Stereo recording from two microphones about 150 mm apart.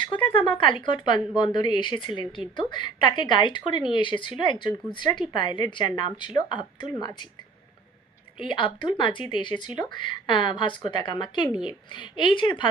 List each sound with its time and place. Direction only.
0.1 s speech: 35° left (ahead or behind)